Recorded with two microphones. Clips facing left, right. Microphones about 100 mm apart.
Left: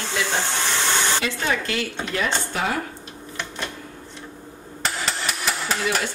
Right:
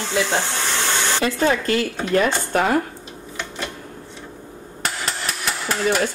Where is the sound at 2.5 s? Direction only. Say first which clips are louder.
Right 7 dB; 45° right (ahead or behind).